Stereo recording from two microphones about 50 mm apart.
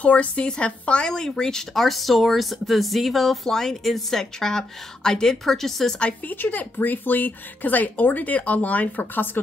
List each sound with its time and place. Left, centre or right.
0.0 s speech: left; by 5.9 s centre
6.2 s speech: left